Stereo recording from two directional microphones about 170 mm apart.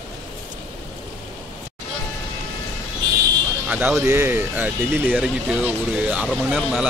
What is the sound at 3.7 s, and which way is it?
Speech, 10° right (ahead or behind).